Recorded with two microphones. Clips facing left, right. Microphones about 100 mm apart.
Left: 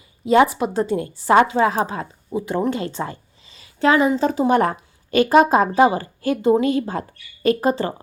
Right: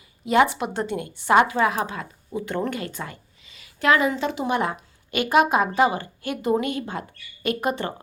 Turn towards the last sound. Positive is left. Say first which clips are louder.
# left 6 dB
turn(degrees=30)  # may be behind; listen again after turning